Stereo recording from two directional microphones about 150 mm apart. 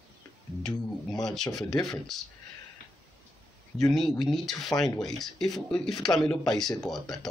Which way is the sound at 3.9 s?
Centre (ahead or behind).